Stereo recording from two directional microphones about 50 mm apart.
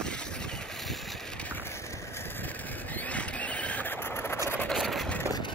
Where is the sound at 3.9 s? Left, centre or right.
Left.